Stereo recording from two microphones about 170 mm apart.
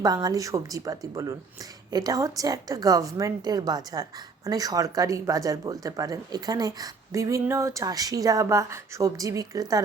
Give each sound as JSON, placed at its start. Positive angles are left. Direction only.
{"t": 0.0, "sound": "speech", "side_deg": -25}